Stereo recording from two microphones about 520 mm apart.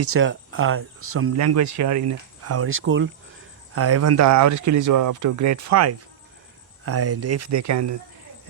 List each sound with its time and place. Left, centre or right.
0.0 s speech: right